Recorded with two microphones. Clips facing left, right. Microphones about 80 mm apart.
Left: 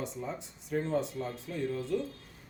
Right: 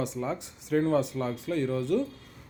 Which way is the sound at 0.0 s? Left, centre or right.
Right.